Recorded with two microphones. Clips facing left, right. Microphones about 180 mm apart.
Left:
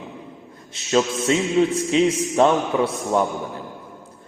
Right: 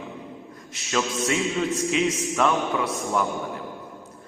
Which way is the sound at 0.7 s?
30° left (ahead or behind).